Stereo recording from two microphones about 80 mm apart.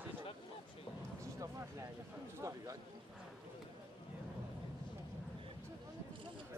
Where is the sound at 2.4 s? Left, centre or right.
Right.